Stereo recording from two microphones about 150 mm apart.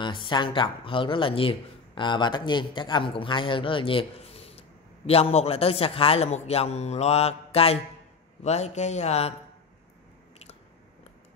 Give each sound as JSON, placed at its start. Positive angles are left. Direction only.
{"t": 0.0, "sound": "speech", "side_deg": 30}